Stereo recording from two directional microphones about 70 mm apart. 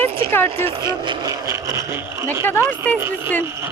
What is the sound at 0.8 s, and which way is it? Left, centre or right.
Speech, right.